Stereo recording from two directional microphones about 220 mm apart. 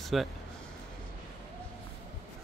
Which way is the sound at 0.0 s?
Centre (ahead or behind).